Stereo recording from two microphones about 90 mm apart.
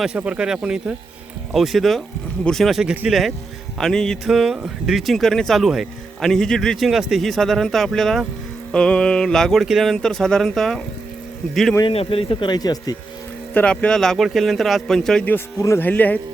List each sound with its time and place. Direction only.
0.2 s speech: 10° right (ahead or behind); by 4.2 s 5° left (ahead or behind)
4.3 s speech: 5° right (ahead or behind)
11.9 s speech: 90° left
12.5 s speech: 50° left (ahead or behind)
13.5 s speech: 15° left (ahead or behind)
15.5 s speech: 35° left (ahead or behind)
15.8 s speech: 20° left (ahead or behind)